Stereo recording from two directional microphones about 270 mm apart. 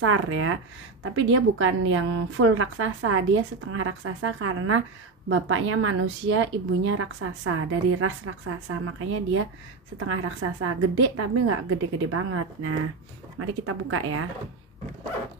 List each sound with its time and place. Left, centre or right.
0.0 s a woman's voice: right